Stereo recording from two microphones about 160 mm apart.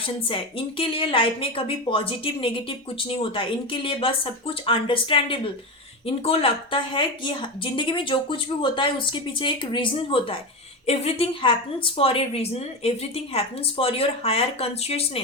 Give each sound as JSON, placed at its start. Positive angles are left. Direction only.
{"t": 0.0, "sound": "a woman's voice", "side_deg": 35}